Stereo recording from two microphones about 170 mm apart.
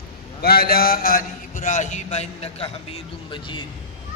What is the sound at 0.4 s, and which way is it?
A man's voice, 65° left (ahead or behind).